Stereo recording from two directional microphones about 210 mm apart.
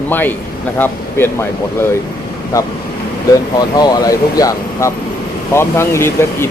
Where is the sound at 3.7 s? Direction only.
15° left (ahead or behind).